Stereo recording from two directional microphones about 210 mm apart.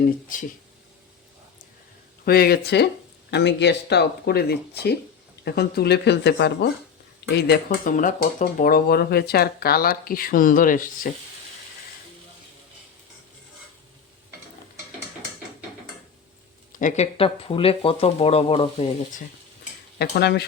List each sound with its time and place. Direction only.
0.3 s speech: 40° left (ahead or behind)
2.2 s speech: 45° left (ahead or behind)
16.7 s speech: 35° left (ahead or behind)
20.0 s speech: 50° left (ahead or behind)